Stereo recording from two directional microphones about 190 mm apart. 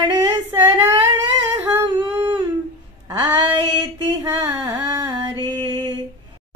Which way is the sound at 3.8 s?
15° right (ahead or behind).